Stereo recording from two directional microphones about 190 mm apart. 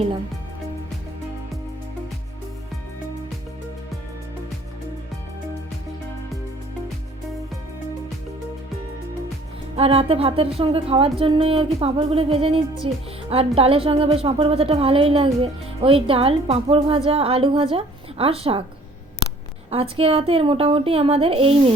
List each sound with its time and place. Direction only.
9.7 s a woman's voice: 30° right (ahead or behind)
19.7 s a woman's voice: 30° right (ahead or behind)